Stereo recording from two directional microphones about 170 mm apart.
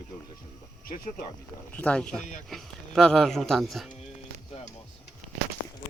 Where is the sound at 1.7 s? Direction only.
5° left (ahead or behind).